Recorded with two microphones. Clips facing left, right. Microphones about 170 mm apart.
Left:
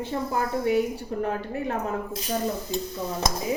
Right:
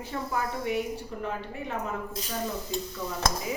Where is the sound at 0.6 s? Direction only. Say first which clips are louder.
Left 6 dB; 45° left (ahead or behind).